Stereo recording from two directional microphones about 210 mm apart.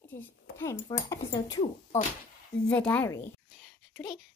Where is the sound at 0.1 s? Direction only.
10° left (ahead or behind).